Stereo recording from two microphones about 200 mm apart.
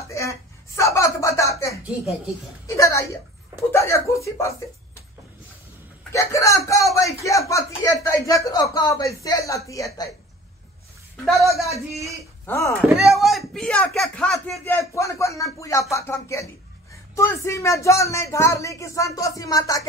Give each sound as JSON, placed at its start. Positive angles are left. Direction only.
{"t": 0.1, "sound": "a sound", "side_deg": 15}
{"t": 2.6, "sound": "speech", "side_deg": 15}
{"t": 6.1, "sound": "speech", "side_deg": 15}
{"t": 11.2, "sound": "a woman's voice", "side_deg": 0}
{"t": 11.7, "sound": "speech", "side_deg": -15}
{"t": 12.4, "sound": "speech", "side_deg": 15}
{"t": 12.9, "sound": "speech", "side_deg": 0}